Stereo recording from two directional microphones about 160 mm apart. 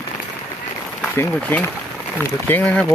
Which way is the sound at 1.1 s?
15° left (ahead or behind).